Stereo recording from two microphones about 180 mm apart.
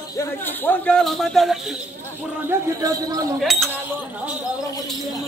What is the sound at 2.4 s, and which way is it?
Speech, 20° right (ahead or behind).